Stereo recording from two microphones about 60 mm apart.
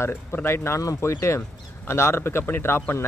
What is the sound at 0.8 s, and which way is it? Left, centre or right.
Speech, left.